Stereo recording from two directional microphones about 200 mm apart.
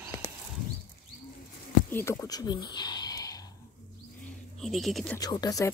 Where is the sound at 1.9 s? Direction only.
15° left (ahead or behind).